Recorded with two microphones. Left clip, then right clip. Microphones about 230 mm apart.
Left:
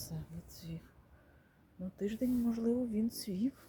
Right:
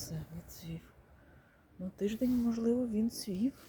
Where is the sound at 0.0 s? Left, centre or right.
Centre.